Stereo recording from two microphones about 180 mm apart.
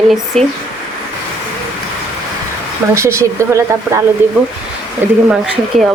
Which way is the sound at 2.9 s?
15° right (ahead or behind).